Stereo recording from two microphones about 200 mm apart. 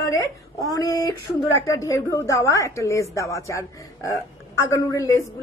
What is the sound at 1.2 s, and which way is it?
A woman's voice, 15° left (ahead or behind).